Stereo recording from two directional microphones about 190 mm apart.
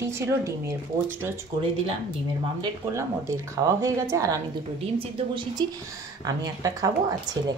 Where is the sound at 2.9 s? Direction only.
15° right (ahead or behind).